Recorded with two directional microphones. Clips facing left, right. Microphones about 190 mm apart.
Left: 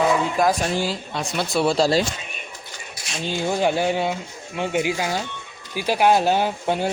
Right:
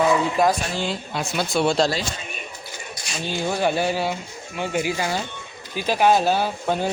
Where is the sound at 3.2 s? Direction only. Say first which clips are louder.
Left 1 dB; 15° left (ahead or behind).